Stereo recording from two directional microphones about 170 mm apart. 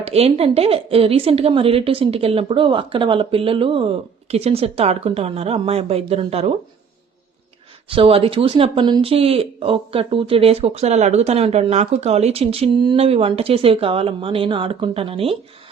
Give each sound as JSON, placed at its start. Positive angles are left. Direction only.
{"t": 0.0, "sound": "speech", "side_deg": -35}
{"t": 7.9, "sound": "speech", "side_deg": -30}